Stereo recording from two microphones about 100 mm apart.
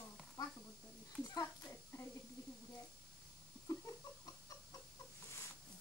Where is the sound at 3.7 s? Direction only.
30° left (ahead or behind).